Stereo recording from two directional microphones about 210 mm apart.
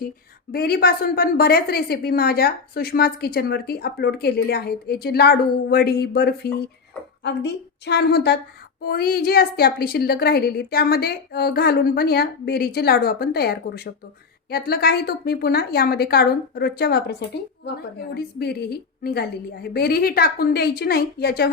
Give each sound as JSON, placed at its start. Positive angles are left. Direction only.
{"t": 0.5, "sound": "a woman's voice", "side_deg": 50}